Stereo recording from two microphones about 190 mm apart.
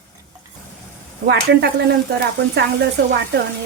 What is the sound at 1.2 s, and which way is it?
Speech, 60° right (ahead or behind).